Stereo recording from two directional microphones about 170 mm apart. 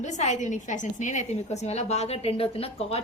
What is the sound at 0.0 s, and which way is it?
A woman's voice, 45° left (ahead or behind).